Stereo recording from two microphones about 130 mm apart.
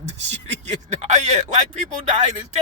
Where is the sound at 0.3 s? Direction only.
60° right (ahead or behind).